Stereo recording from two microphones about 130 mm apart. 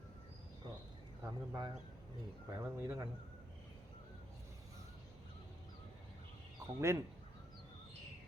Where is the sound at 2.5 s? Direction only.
20° right (ahead or behind).